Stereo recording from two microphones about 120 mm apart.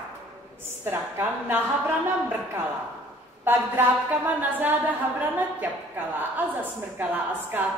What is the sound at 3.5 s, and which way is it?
A woman's voice, 15° right (ahead or behind).